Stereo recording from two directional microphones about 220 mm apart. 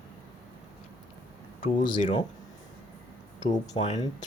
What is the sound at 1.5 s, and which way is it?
Speech, 25° left (ahead or behind).